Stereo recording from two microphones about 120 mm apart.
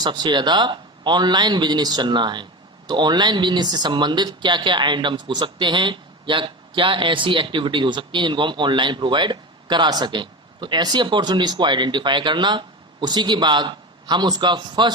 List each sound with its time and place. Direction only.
0.0 s speech: 40° right (ahead or behind)